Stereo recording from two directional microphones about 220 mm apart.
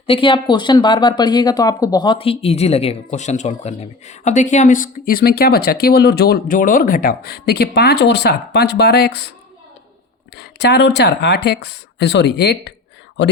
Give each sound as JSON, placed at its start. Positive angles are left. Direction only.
{"t": 0.1, "sound": "speech", "side_deg": 25}
{"t": 10.3, "sound": "speech", "side_deg": 50}